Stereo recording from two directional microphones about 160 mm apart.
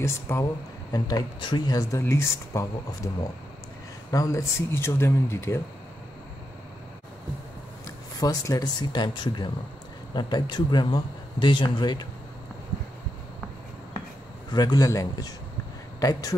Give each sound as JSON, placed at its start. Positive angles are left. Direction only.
{"t": 0.0, "sound": "speech", "side_deg": 15}
{"t": 4.1, "sound": "speech", "side_deg": 20}
{"t": 7.8, "sound": "speech", "side_deg": 20}
{"t": 14.5, "sound": "speech", "side_deg": 25}